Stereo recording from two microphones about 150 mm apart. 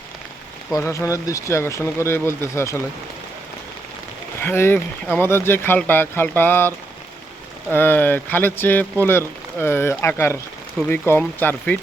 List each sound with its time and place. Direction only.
0.7 s speech: 20° left (ahead or behind)
4.4 s speech: 15° left (ahead or behind)